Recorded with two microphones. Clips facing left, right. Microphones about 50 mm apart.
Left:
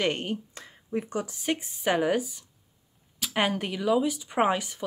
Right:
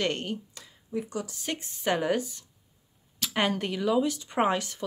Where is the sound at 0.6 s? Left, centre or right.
Left.